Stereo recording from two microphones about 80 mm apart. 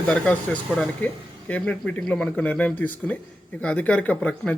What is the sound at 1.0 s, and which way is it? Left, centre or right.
Speech, centre.